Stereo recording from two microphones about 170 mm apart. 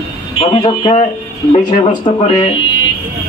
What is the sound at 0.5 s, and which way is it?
Speech, 30° left (ahead or behind).